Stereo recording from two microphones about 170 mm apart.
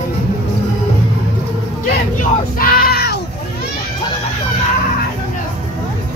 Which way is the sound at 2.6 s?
60° left (ahead or behind).